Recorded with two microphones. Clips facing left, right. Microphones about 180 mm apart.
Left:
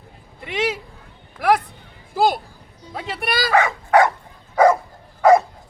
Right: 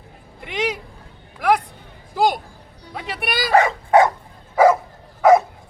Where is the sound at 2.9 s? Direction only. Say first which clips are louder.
Left 1 dB; centre (ahead or behind).